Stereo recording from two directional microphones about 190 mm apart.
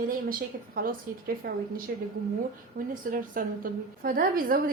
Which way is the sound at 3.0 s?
45° right (ahead or behind).